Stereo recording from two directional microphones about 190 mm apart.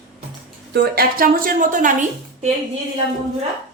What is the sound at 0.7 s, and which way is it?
A woman's voice, 55° right (ahead or behind).